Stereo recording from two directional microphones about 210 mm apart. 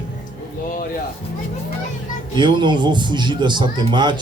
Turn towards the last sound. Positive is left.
turn(degrees=-20)  # may be behind; listen again after turning